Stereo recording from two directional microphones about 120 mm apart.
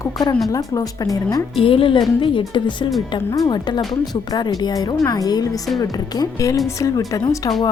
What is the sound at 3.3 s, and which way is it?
Speech, 30° left (ahead or behind).